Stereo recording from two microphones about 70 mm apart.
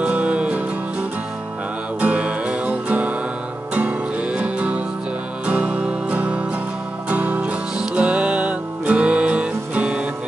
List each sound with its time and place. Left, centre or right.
0.0 s music: centre
2.0 s music: centre